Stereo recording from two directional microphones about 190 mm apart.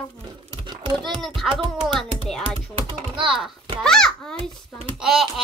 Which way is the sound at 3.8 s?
5° left (ahead or behind).